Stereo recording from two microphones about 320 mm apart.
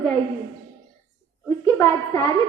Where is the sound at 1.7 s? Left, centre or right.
Centre.